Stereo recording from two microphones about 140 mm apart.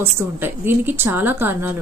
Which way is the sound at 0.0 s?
15° right (ahead or behind).